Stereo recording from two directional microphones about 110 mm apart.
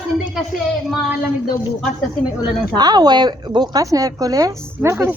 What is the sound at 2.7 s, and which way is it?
A woman's voice, 40° right (ahead or behind).